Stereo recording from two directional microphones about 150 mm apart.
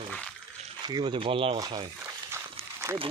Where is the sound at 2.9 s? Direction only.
20° right (ahead or behind).